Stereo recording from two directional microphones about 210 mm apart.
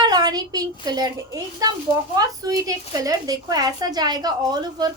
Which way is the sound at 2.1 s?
15° right (ahead or behind).